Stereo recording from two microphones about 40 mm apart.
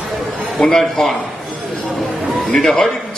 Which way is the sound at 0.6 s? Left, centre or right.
Centre.